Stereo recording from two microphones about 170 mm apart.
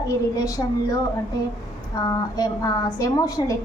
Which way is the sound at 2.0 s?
20° left (ahead or behind).